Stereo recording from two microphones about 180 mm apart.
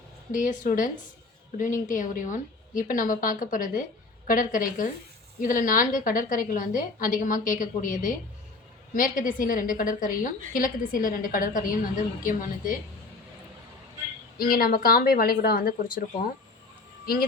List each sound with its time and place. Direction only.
0.3 s a woman's voice: 50° left (ahead or behind)
9.0 s a woman's voice: 50° left (ahead or behind)
14.3 s a woman's voice: 55° left (ahead or behind)